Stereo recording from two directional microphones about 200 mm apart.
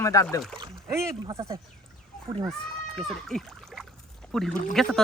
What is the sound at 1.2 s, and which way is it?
Speech, 20° right (ahead or behind).